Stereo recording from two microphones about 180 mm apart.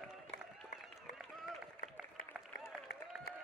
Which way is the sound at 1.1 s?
5° right (ahead or behind).